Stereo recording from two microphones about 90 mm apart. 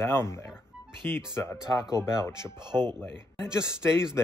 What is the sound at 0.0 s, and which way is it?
Speech, 30° left (ahead or behind).